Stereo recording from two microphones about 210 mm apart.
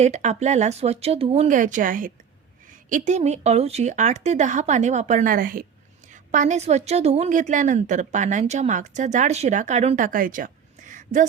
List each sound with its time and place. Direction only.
0.0 s a woman's voice: 35° right (ahead or behind)